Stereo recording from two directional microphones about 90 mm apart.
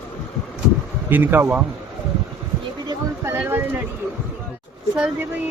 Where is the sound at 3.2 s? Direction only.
30° right (ahead or behind).